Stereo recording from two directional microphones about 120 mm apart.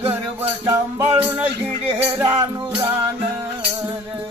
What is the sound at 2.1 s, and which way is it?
Music, 20° right (ahead or behind).